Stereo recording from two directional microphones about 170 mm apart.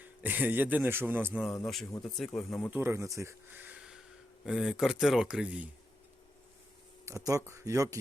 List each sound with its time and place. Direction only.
0.0 s speech: 10° right (ahead or behind)
1.6 s speech: 5° left (ahead or behind)
2.6 s speech: 15° right (ahead or behind)
7.0 s speech: 20° right (ahead or behind)